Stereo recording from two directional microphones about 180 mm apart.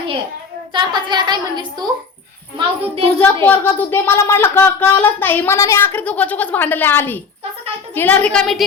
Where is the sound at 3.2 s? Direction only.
10° left (ahead or behind).